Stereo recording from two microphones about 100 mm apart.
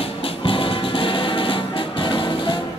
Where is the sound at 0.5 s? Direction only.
60° left (ahead or behind).